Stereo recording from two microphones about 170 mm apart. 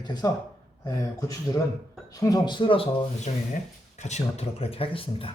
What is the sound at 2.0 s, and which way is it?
Speech, 20° left (ahead or behind).